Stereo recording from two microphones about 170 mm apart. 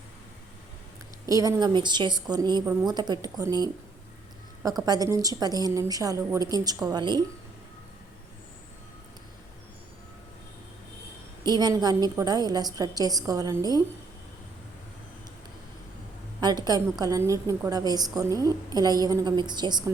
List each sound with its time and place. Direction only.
1.3 s a woman's voice: 20° right (ahead or behind)
4.9 s a woman's voice: 20° right (ahead or behind)
11.4 s a woman's voice: 25° right (ahead or behind)
16.4 s a woman's voice: 25° right (ahead or behind)